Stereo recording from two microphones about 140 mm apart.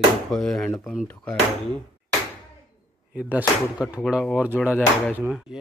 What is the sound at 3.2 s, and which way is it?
Speech, 10° right (ahead or behind).